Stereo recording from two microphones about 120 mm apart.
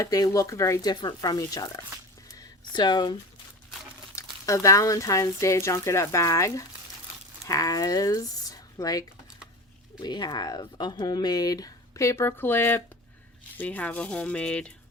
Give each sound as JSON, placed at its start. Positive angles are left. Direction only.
{"t": 0.0, "sound": "speech", "side_deg": 30}
{"t": 4.1, "sound": "speech", "side_deg": 25}